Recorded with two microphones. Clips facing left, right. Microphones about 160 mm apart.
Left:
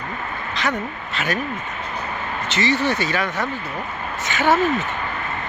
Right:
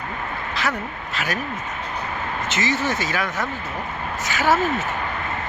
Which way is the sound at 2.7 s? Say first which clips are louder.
Left 3 dB; 40° right (ahead or behind).